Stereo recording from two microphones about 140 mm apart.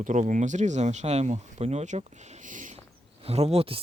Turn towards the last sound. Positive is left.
turn(degrees=-40)  # may be behind; listen again after turning